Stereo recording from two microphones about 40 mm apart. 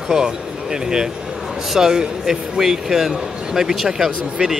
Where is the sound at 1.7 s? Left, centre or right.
Centre.